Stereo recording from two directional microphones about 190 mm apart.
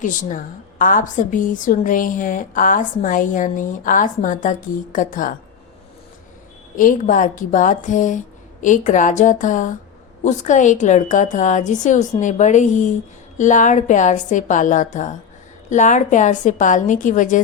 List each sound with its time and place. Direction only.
0.0 s a woman's voice: 45° left (ahead or behind)
6.7 s a woman's voice: 45° left (ahead or behind)